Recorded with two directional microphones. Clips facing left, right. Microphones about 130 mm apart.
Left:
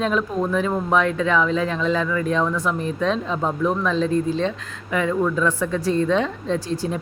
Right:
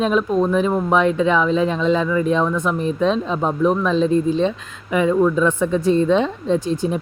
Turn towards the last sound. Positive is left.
turn(degrees=-20)  # may be behind; listen again after turning